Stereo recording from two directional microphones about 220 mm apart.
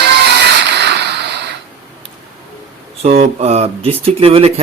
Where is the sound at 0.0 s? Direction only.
50° right (ahead or behind).